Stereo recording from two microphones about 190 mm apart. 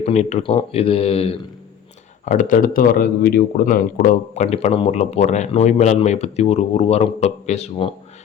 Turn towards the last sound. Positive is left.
turn(degrees=35)  # may be behind; listen again after turning